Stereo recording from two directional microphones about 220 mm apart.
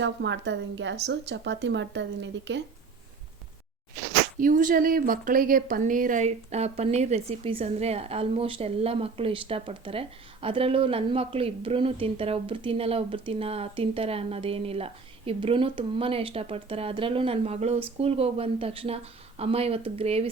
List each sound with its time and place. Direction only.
0.0 s a woman's voice: 55° right (ahead or behind)
4.4 s speech: 40° right (ahead or behind)